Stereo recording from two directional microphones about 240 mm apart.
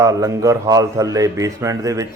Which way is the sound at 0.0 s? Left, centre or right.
Centre.